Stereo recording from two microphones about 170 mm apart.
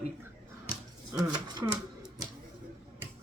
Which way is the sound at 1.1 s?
25° right (ahead or behind).